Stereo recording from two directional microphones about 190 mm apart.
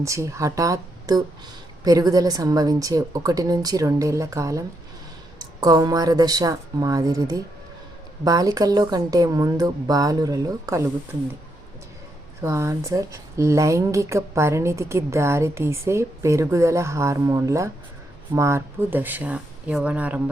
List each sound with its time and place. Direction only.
0.0 s speech: 15° right (ahead or behind)
12.4 s speech: 15° right (ahead or behind)